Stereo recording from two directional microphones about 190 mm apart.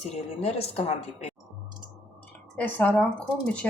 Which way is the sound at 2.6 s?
10° left (ahead or behind).